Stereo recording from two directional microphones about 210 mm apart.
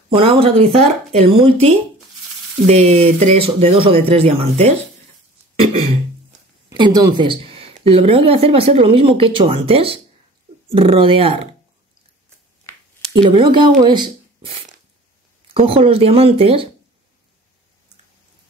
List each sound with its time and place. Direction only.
0.1 s a woman's voice: 25° right (ahead or behind)
6.7 s a woman's voice: 20° right (ahead or behind)
13.2 s a woman's voice: 20° right (ahead or behind)